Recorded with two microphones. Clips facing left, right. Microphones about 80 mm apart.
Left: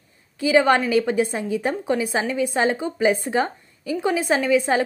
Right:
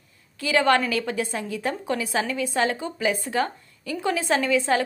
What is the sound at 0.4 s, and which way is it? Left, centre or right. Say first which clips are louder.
A woman's voice: left 3 dB; centre.